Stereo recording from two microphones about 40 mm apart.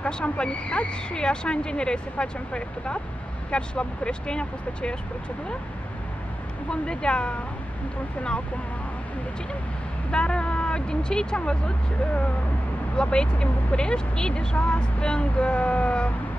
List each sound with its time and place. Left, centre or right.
0.0 s speech: left
6.7 s speech: left
10.1 s speech: left
12.9 s speech: left